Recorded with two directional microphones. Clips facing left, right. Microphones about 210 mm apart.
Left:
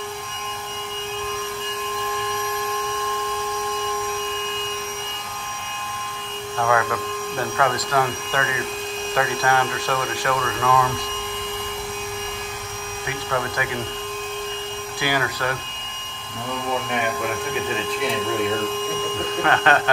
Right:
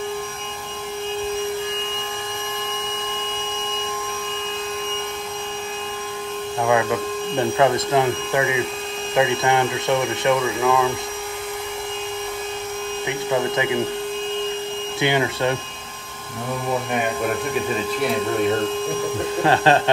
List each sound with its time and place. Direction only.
6.6 s speech: 15° right (ahead or behind)
13.3 s speech: 20° right (ahead or behind)
15.0 s speech: 25° right (ahead or behind)
19.4 s speech: 30° right (ahead or behind)